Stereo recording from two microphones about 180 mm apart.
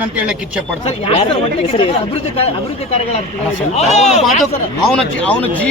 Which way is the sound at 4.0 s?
40° left (ahead or behind).